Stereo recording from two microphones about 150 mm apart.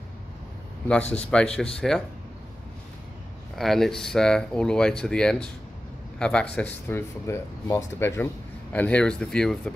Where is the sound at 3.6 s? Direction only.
Centre (ahead or behind).